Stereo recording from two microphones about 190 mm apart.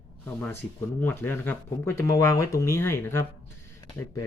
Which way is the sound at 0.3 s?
10° left (ahead or behind).